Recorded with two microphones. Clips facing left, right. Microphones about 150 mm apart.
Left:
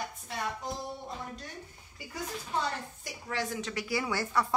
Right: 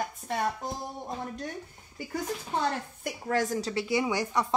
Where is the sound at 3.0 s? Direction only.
45° right (ahead or behind).